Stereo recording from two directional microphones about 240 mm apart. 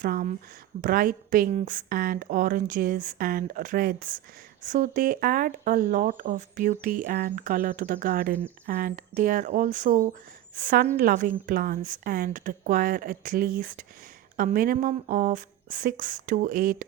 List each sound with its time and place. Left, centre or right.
0.0 s speech: right